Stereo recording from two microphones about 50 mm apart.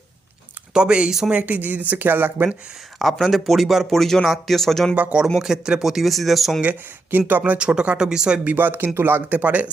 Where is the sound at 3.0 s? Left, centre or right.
Centre.